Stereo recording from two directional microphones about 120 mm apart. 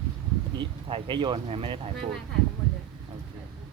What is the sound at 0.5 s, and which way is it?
Speech, 45° right (ahead or behind).